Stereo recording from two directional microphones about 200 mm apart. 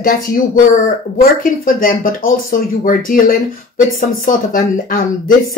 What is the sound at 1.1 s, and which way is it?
Speech, 45° left (ahead or behind).